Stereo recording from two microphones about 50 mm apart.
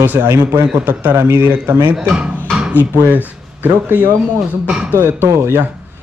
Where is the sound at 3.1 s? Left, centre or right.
Right.